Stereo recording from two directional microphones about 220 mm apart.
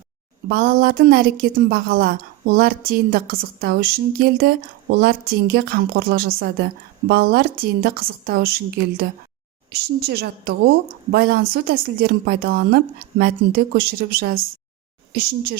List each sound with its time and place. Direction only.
0.4 s a woman's voice: 40° right (ahead or behind)